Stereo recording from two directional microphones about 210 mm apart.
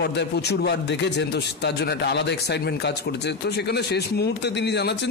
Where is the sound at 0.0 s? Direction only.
50° left (ahead or behind).